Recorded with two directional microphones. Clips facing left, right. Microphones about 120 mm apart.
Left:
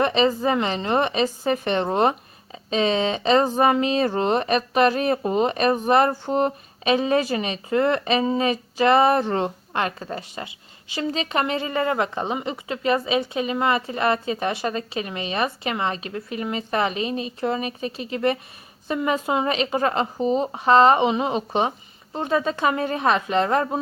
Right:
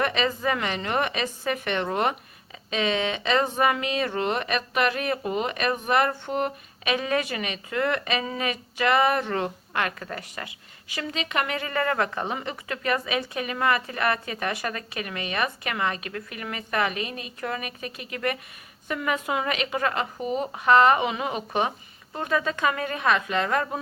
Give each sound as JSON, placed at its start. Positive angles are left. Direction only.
{"t": 0.0, "sound": "a woman's voice", "side_deg": 30}